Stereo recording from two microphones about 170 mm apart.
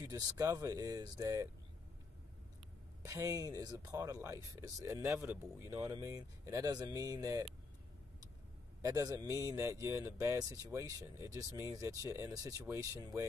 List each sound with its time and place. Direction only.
0.0 s speech: 20° right (ahead or behind)
3.0 s speech: 20° right (ahead or behind)
8.8 s speech: 20° right (ahead or behind)